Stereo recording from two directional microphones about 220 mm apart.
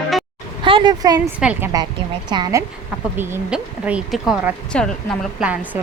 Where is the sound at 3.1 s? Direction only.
10° right (ahead or behind).